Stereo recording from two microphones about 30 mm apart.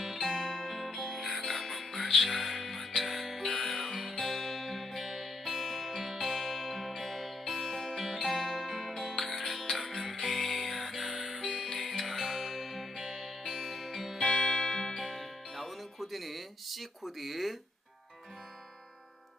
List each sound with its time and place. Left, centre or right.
0.0 s music: centre
0.9 s music: centre
1.1 s music: centre
11.7 s music: centre
14.2 s music: left
15.2 s music: centre